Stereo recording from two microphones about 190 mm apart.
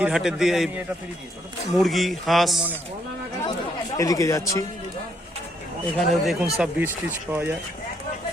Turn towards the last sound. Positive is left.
turn(degrees=-10)  # may be behind; listen again after turning